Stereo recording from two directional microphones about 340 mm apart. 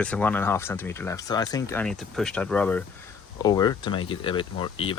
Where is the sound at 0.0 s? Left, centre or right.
Centre.